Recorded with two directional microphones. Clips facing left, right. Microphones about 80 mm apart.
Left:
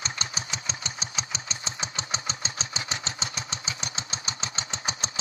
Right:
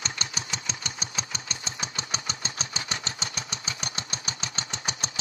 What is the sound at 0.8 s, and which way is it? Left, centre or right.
Engine, left.